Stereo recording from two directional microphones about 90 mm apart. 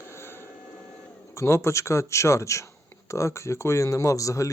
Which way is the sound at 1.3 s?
30° left (ahead or behind).